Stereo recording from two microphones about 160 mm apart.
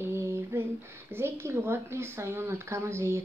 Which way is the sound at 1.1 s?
15° right (ahead or behind).